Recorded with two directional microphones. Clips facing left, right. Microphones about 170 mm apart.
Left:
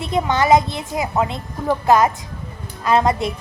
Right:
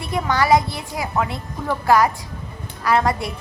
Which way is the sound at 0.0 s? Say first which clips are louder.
Left 2 dB; 20° left (ahead or behind).